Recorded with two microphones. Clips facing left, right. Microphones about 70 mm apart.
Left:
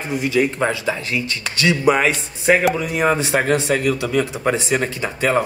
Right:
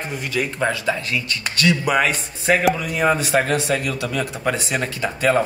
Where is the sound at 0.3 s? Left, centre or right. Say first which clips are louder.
Left 3 dB; left.